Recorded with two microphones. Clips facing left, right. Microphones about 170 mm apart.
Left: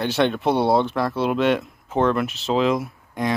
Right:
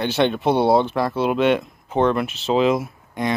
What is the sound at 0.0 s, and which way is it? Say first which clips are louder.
Speech: right 1 dB; centre (ahead or behind).